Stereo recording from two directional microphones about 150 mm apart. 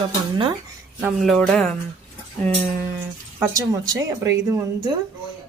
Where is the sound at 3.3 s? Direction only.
20° right (ahead or behind).